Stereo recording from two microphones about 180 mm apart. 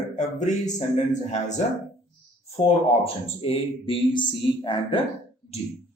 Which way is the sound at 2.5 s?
30° left (ahead or behind).